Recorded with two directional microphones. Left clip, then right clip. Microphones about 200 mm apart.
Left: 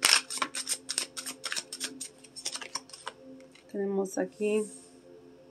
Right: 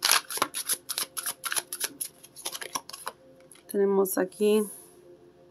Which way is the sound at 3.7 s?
25° right (ahead or behind).